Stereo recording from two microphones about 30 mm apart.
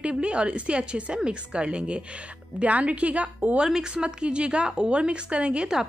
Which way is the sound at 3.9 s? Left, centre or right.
Right.